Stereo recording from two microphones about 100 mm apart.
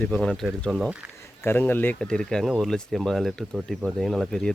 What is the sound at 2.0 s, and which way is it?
Speech, 5° left (ahead or behind).